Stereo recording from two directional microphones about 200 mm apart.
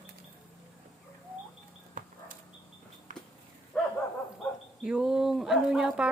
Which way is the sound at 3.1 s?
40° right (ahead or behind).